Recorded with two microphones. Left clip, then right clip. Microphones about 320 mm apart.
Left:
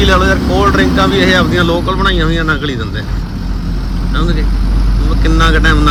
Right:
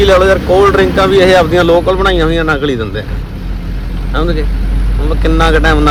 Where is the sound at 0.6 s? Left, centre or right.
Right.